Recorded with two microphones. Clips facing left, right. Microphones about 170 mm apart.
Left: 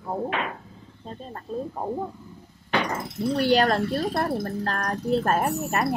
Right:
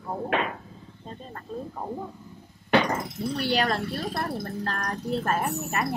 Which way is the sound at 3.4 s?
40° left (ahead or behind).